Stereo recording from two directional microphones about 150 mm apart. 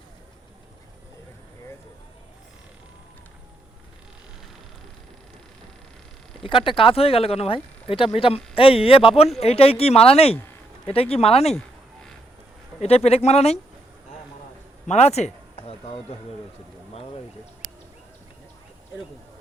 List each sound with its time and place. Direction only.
6.4 s speech: 35° left (ahead or behind)
12.8 s speech: 45° left (ahead or behind)
14.8 s speech: 45° left (ahead or behind)